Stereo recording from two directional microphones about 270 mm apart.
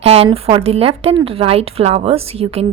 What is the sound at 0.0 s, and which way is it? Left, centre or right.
A woman's voice, right.